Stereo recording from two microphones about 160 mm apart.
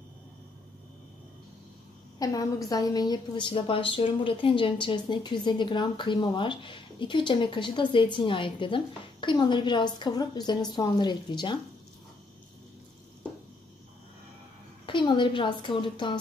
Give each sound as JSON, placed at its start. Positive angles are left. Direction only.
{"t": 2.1, "sound": "a woman's voice", "side_deg": 25}
{"t": 14.9, "sound": "a woman's voice", "side_deg": 30}